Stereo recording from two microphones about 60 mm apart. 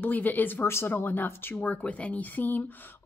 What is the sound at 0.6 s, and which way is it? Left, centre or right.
Speech, left.